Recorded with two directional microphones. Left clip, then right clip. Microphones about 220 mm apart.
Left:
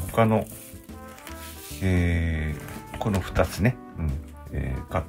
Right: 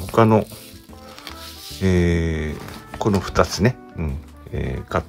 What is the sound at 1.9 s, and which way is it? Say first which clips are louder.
Speech: right 8 dB; 30° right (ahead or behind).